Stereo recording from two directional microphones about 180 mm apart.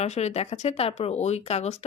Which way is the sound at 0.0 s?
40° left (ahead or behind).